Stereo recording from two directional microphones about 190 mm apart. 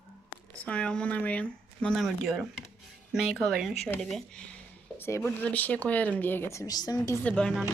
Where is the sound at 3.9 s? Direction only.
Centre (ahead or behind); by 7.1 s 20° left (ahead or behind).